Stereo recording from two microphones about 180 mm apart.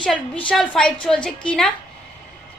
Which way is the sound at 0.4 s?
5° left (ahead or behind).